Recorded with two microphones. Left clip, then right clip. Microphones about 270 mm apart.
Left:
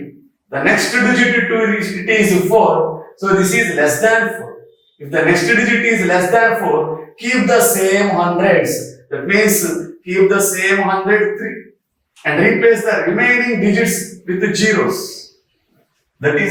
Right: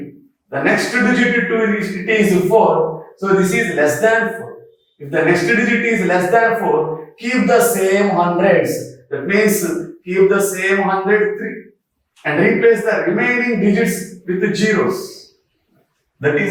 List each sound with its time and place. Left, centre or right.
0.5 s a man's voice: centre
16.2 s a man's voice: centre